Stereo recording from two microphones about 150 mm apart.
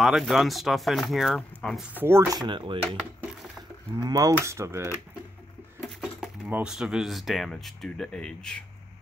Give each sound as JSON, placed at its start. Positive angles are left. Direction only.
{"t": 0.0, "sound": "speech", "side_deg": 0}
{"t": 2.0, "sound": "speech", "side_deg": -15}
{"t": 4.0, "sound": "speech", "side_deg": -25}
{"t": 5.8, "sound": "speech", "side_deg": 0}